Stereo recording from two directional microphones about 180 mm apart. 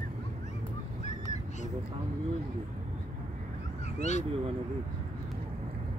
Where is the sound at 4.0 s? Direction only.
40° left (ahead or behind).